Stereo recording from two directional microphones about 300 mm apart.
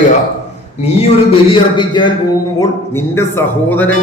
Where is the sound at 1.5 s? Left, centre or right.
Centre.